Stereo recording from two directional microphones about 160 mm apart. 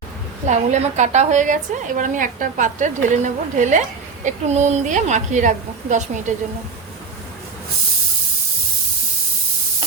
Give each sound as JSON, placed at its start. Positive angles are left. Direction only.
{"t": 0.4, "sound": "a woman's voice", "side_deg": -45}